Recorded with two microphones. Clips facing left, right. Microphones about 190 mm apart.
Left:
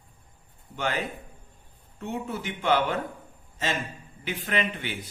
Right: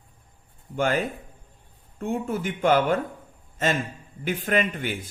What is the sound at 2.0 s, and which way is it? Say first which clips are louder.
Speech: right 5 dB; 50° right (ahead or behind).